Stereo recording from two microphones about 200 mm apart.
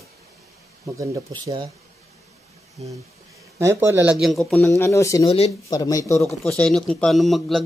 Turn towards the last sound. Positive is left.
turn(degrees=0)  # may be behind; listen again after turning